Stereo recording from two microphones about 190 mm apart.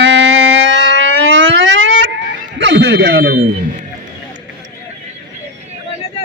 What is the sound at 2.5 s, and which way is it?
Speech, 70° right (ahead or behind).